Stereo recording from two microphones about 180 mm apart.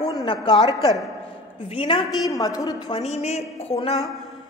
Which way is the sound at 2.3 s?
20° left (ahead or behind).